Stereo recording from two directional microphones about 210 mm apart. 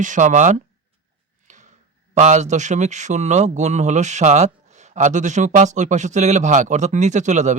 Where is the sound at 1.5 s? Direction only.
35° right (ahead or behind).